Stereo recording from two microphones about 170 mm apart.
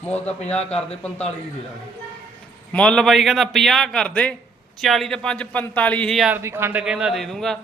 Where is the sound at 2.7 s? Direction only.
5° left (ahead or behind).